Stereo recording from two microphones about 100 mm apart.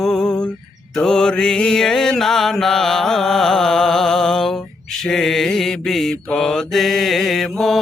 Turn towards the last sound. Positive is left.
turn(degrees=0)  # may be behind; listen again after turning